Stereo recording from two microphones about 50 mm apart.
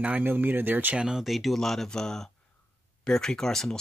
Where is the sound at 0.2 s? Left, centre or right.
Right.